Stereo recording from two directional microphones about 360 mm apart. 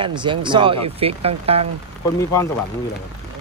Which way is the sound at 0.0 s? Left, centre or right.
Centre.